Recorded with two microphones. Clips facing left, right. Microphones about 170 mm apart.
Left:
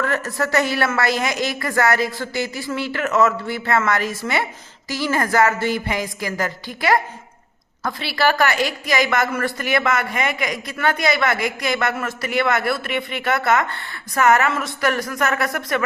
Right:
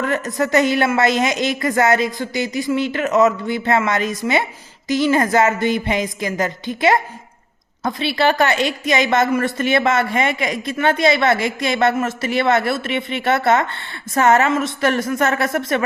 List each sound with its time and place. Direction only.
0.0 s a woman's voice: 20° right (ahead or behind)